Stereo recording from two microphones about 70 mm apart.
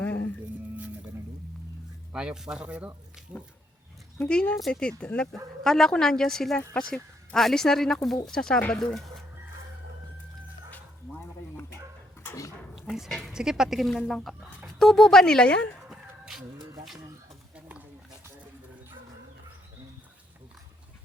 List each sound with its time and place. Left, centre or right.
0.0 s music: left
2.1 s speech: centre
4.3 s a woman's voice: centre
10.7 s bow-wow: left
12.3 s dog: left
12.7 s dog: centre
13.3 s a woman's voice: centre
15.9 s a sound: centre
17.5 s a sound: right